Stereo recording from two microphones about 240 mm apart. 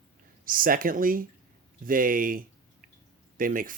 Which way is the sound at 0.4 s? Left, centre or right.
Right.